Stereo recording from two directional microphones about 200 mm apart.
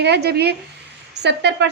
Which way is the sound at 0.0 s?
55° right (ahead or behind).